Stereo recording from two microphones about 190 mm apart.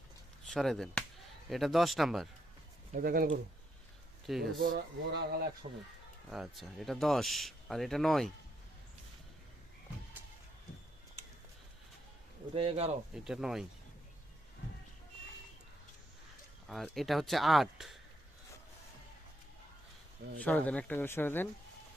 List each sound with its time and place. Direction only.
0.4 s speech: centre (ahead or behind)
2.9 s speech: 50° right (ahead or behind)
4.3 s speech: centre (ahead or behind)
5.1 s speech: 55° right (ahead or behind)
6.3 s speech: centre (ahead or behind)
12.5 s speech: 30° right (ahead or behind)
13.1 s speech: 5° right (ahead or behind)
16.6 s speech: centre (ahead or behind)
20.4 s speech: 5° left (ahead or behind)